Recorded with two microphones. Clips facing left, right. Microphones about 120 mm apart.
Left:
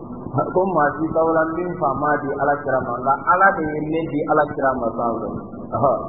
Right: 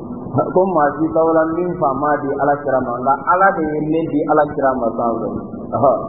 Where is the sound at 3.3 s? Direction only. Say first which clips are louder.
Right 2 dB; 40° right (ahead or behind).